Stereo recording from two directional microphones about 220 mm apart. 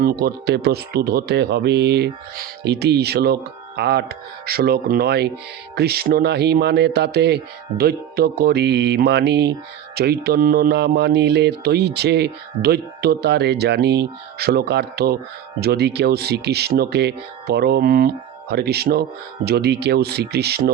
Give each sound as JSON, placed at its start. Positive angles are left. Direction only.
{"t": 0.0, "sound": "speech", "side_deg": -45}